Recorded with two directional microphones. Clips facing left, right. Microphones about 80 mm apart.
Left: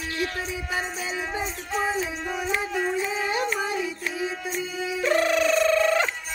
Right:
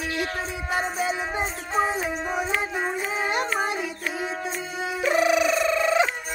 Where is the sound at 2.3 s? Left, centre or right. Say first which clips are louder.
Even; right.